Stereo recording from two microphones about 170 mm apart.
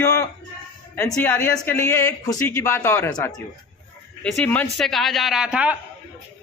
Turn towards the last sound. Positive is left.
turn(degrees=-5)  # may be behind; listen again after turning